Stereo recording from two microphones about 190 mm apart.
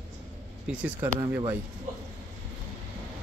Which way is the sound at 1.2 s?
15° right (ahead or behind).